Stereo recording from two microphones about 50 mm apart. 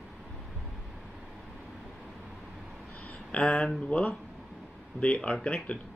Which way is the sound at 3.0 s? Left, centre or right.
Left.